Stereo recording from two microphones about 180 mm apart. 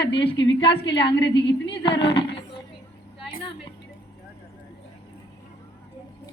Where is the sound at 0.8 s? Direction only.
75° left (ahead or behind).